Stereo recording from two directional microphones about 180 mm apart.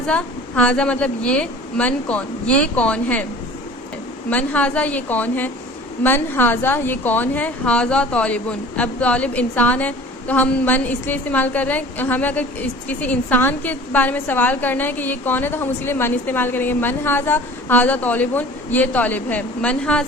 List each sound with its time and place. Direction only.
0.0 s a woman's voice: 5° left (ahead or behind)
4.3 s a woman's voice: 10° left (ahead or behind)